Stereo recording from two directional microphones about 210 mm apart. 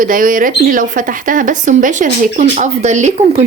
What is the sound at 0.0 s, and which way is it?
Speech, 40° right (ahead or behind).